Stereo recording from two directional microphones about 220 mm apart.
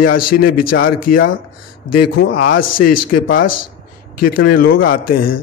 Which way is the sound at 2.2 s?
40° left (ahead or behind).